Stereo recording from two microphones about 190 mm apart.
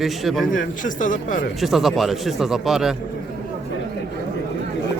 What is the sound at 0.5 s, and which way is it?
Speech, 45° left (ahead or behind).